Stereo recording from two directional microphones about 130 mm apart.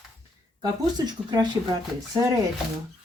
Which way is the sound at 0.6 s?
30° right (ahead or behind).